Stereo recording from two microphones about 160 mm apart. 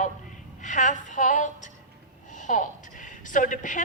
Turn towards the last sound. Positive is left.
turn(degrees=55)  # may be behind; listen again after turning